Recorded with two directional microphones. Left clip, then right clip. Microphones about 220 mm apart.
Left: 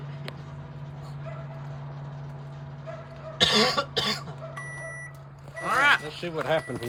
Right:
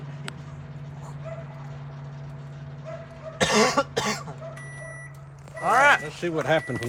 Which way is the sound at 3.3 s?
Centre (ahead or behind).